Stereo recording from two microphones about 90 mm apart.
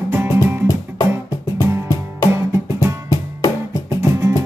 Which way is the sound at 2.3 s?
30° right (ahead or behind).